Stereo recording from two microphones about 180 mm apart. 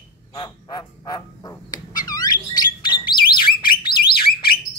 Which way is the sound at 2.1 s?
20° left (ahead or behind).